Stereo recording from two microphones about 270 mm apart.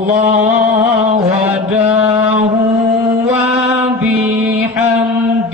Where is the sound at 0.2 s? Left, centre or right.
Right.